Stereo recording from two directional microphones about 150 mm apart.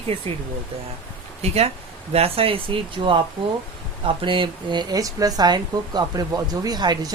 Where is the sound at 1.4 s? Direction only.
45° right (ahead or behind).